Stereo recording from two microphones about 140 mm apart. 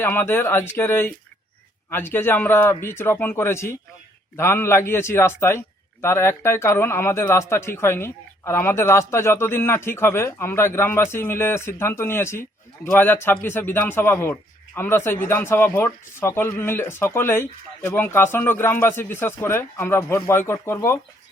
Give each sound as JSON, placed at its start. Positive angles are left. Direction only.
{"t": 0.0, "sound": "a man's voice", "side_deg": 15}